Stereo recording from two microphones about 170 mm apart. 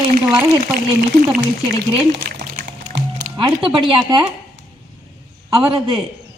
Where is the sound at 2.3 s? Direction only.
60° right (ahead or behind).